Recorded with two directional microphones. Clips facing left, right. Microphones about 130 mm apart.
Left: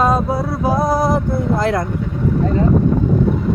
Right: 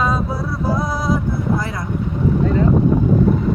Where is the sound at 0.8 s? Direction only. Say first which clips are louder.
Left 7 dB; 45° left (ahead or behind).